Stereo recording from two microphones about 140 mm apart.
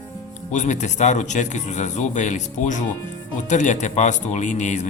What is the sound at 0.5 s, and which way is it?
Speech, 60° left (ahead or behind).